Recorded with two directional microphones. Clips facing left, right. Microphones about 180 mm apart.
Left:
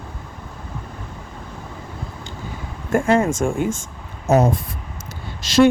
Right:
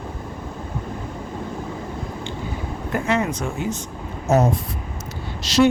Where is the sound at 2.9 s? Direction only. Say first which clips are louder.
Left 5 dB; 50° left (ahead or behind).